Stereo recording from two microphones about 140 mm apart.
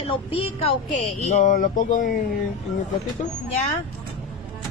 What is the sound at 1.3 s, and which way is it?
Speech, 75° left (ahead or behind).